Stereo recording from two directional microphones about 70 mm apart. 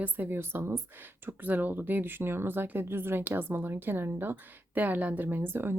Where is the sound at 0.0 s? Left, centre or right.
Right.